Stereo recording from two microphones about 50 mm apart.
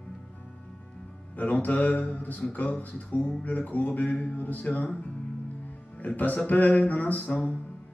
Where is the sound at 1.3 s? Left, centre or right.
Left.